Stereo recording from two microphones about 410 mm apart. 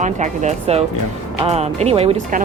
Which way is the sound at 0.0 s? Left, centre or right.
Centre.